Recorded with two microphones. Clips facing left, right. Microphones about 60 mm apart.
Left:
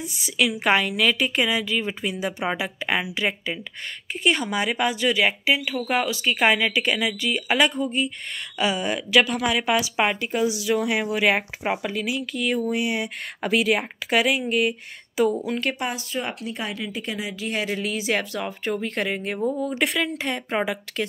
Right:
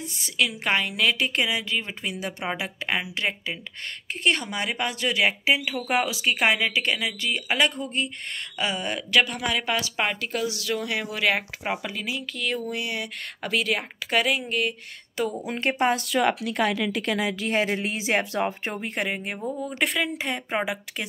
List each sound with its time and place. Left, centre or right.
0.0 s a woman's voice: centre
15.4 s a woman's voice: right
16.1 s speech: right
17.5 s a woman's voice: right
18.9 s a woman's voice: centre